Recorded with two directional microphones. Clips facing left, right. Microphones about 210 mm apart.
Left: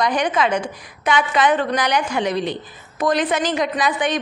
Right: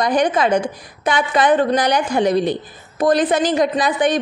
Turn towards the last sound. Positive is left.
turn(degrees=-35)  # may be behind; listen again after turning